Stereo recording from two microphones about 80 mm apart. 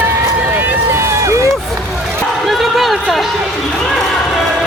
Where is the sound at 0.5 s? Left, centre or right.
Right.